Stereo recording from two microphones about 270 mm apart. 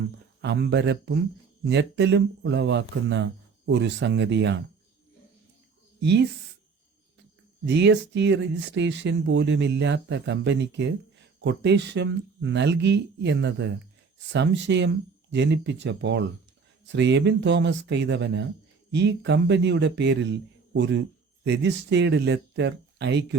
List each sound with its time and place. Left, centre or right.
0.4 s speech: right
6.0 s speech: right
7.6 s speech: right